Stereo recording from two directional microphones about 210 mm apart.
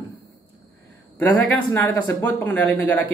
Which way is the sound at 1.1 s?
5° left (ahead or behind).